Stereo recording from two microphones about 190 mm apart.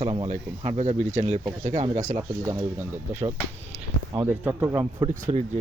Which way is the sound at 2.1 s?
15° right (ahead or behind).